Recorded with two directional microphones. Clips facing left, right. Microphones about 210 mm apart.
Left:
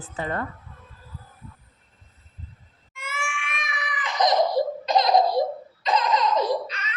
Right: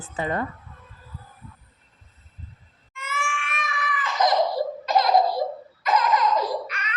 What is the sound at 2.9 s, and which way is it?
Crying, 10° left (ahead or behind).